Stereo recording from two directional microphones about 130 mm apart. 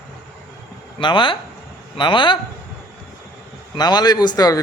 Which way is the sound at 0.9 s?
40° left (ahead or behind).